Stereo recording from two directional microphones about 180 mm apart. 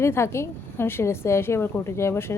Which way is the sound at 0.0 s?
15° left (ahead or behind).